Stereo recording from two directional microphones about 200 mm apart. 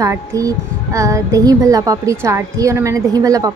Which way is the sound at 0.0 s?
15° right (ahead or behind).